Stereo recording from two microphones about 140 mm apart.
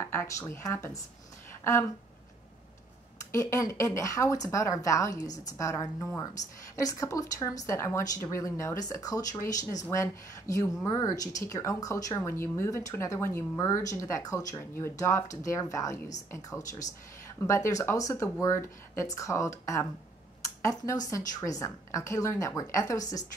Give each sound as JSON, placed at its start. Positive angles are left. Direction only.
{"t": 0.0, "sound": "speech", "side_deg": 20}
{"t": 3.3, "sound": "speech", "side_deg": 20}